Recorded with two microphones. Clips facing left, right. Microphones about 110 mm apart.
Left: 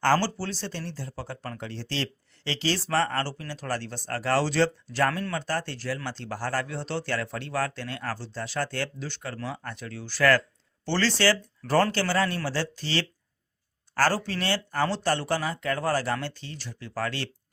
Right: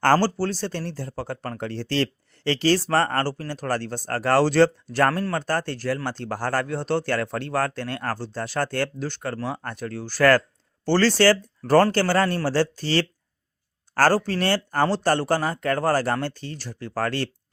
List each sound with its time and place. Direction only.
0.0 s speech: 45° right (ahead or behind)